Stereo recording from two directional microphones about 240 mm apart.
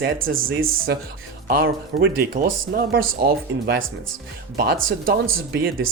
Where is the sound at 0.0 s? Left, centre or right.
Right.